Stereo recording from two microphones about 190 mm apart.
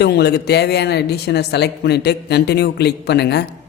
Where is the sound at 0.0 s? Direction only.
60° left (ahead or behind).